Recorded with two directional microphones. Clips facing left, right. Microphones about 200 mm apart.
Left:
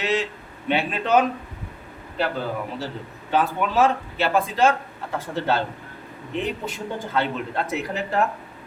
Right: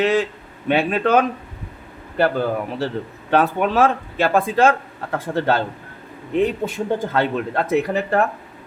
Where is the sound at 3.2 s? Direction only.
60° right (ahead or behind).